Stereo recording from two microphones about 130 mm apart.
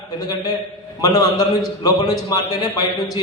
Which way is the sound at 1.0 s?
30° left (ahead or behind).